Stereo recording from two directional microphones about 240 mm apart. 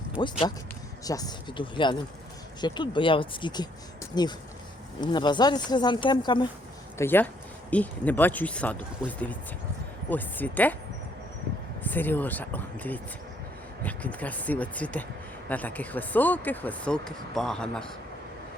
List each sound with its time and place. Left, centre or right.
0.2 s speech: centre
11.8 s speech: centre